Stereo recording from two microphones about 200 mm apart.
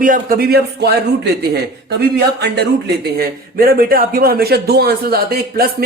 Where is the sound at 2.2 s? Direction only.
55° right (ahead or behind).